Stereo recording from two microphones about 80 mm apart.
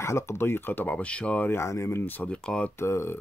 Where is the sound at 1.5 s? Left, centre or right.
Left.